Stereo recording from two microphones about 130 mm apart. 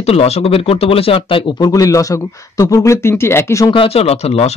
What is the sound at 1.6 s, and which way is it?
Speech, 30° left (ahead or behind).